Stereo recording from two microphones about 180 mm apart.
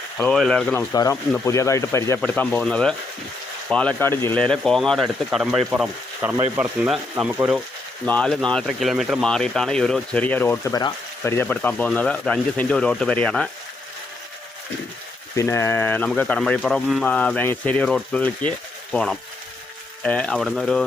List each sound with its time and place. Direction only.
0.2 s speech: 5° left (ahead or behind)
0.9 s speech: 20° left (ahead or behind); by 7.6 s 10° right (ahead or behind)
8.0 s speech: 5° left (ahead or behind)
15.4 s speech: 15° left (ahead or behind)